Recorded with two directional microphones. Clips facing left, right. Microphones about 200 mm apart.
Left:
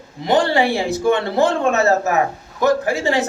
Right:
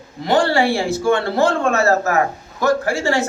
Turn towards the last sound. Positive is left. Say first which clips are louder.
# even
turn(degrees=20)  # may be behind; listen again after turning